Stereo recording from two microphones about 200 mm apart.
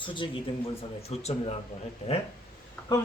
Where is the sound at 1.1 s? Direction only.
30° left (ahead or behind).